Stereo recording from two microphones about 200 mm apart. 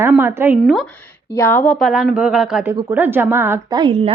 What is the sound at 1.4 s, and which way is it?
A woman's voice, 10° left (ahead or behind).